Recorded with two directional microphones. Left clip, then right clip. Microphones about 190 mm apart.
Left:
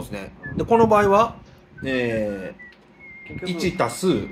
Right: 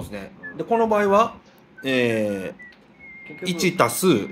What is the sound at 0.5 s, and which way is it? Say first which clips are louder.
Speech: left 4 dB; 25° left (ahead or behind).